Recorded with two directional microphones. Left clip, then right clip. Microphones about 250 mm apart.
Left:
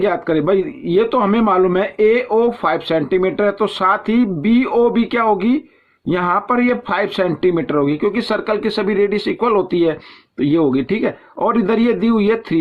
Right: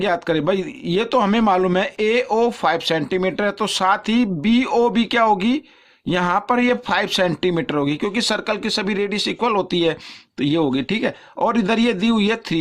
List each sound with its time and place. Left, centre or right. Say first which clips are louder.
0.0 s speech: left 3 dB; right